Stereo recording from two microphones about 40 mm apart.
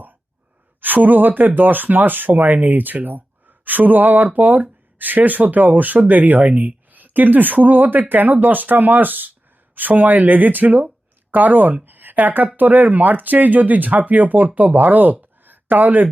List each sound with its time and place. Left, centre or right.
0.8 s speech: right
2.4 s speech: right
11.9 s a sound: right
12.5 s speech: right